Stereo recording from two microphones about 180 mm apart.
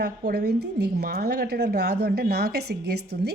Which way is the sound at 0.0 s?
60° right (ahead or behind).